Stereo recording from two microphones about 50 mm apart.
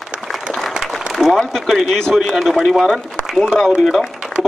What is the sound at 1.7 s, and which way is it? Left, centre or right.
Speech, centre.